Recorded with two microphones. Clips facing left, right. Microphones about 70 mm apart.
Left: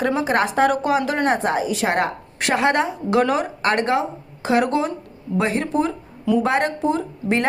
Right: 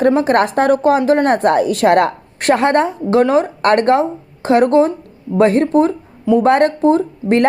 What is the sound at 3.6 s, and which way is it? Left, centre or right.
Speech, right.